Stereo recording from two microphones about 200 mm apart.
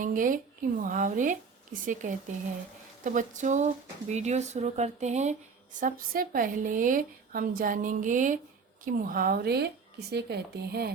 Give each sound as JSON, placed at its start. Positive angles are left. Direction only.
{"t": 0.0, "sound": "a woman's voice", "side_deg": -40}